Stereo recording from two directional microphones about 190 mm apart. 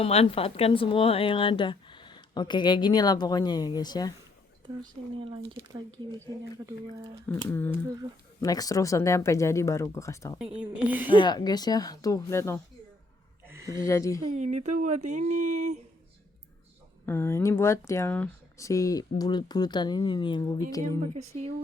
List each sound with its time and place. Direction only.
0.0 s a woman's voice: 30° left (ahead or behind)
5.2 s speech: 25° right (ahead or behind)
7.3 s speech: 10° left (ahead or behind)
10.6 s a woman's voice: 10° right (ahead or behind)
11.1 s a woman's voice: 25° left (ahead or behind)
13.5 s a sound: 15° right (ahead or behind)
13.8 s speech: 15° left (ahead or behind)
14.3 s speech: 40° right (ahead or behind)
17.1 s speech: 15° left (ahead or behind)
21.0 s speech: 35° right (ahead or behind)